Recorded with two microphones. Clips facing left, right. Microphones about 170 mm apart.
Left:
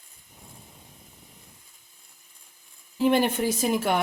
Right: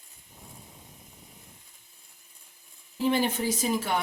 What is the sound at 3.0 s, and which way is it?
Speech, 60° left (ahead or behind).